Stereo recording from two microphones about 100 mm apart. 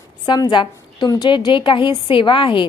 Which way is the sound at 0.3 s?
45° left (ahead or behind).